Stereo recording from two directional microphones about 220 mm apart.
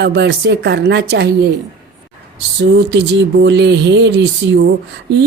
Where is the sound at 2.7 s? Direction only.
50° right (ahead or behind).